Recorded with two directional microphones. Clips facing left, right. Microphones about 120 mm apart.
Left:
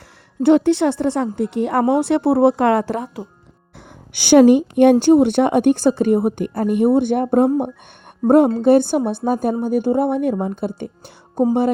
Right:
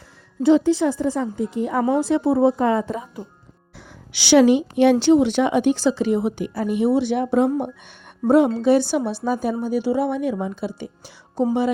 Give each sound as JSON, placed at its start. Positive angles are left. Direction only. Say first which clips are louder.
{"t": 0.4, "sound": "speech", "louder": "left 3 dB", "side_deg": 65}
{"t": 4.1, "sound": "a woman's voice", "louder": "left 4 dB", "side_deg": 50}